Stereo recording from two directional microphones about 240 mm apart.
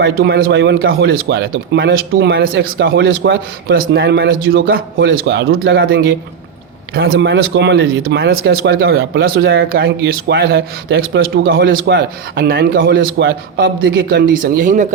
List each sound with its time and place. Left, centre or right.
0.0 s a man's voice: right